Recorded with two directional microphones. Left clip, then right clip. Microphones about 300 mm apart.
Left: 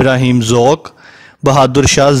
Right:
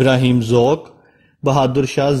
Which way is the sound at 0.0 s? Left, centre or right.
Left.